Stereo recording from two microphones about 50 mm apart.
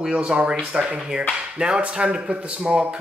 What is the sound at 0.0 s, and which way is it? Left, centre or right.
Speech, centre.